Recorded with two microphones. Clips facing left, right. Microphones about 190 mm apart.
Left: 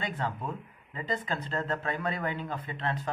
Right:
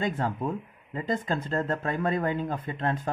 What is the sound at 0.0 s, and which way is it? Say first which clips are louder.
Speech: right 6 dB; 45° right (ahead or behind).